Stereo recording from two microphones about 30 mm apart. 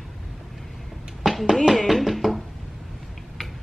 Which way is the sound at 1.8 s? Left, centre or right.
Centre.